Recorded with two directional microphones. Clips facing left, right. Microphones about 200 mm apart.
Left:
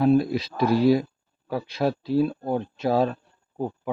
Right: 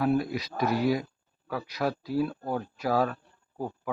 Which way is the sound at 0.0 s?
25° left (ahead or behind).